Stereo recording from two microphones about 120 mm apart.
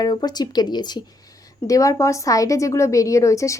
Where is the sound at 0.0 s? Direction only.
35° left (ahead or behind).